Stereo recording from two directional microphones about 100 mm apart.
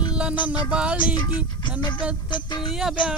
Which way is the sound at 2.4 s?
45° left (ahead or behind).